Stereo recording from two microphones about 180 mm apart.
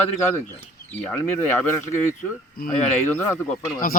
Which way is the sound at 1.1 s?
15° left (ahead or behind).